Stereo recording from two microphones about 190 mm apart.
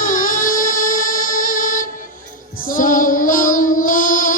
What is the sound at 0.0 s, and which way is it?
Music, 45° left (ahead or behind).